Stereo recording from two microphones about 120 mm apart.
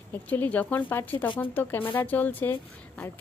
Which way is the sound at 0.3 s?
15° left (ahead or behind).